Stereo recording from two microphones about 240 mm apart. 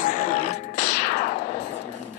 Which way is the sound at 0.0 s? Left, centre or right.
Left.